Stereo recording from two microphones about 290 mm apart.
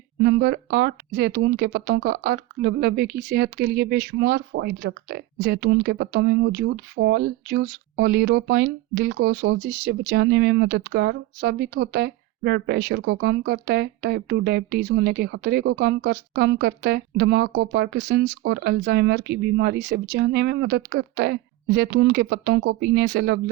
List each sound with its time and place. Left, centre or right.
0.2 s speech: right